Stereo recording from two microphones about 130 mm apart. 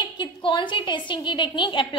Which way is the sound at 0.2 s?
40° left (ahead or behind).